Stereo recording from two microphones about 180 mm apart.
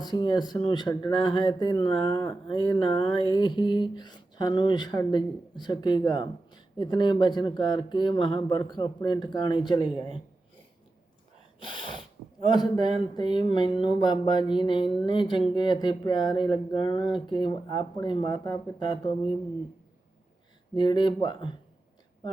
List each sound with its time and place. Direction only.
0.0 s speech: 25° left (ahead or behind)
11.6 s sneeze: 25° left (ahead or behind)
12.5 s speech: 25° left (ahead or behind)
20.7 s speech: 25° left (ahead or behind)